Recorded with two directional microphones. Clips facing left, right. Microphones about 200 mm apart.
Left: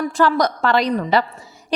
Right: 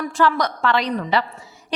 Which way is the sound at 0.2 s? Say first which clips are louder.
Left 2 dB; 40° left (ahead or behind).